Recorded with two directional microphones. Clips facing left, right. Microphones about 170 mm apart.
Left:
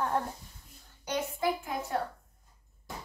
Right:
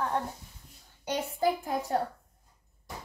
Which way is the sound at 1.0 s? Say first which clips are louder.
Right 2 dB; 35° right (ahead or behind).